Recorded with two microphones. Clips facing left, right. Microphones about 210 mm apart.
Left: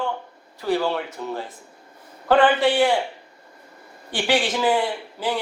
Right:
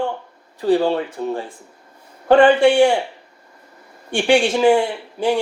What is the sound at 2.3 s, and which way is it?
Speech, 15° right (ahead or behind).